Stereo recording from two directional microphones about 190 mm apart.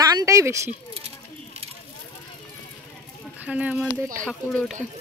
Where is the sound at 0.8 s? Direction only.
15° left (ahead or behind).